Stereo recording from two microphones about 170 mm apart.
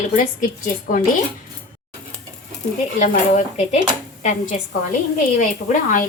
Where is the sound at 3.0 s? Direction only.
45° left (ahead or behind).